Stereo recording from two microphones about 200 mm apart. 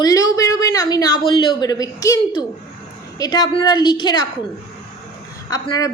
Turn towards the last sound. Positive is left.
turn(degrees=20)  # may be behind; listen again after turning